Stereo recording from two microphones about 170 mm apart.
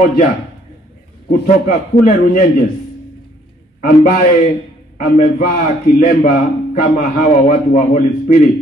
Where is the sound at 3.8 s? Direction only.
60° left (ahead or behind).